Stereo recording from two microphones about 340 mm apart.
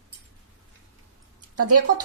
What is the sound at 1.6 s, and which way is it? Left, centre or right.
Speech, right.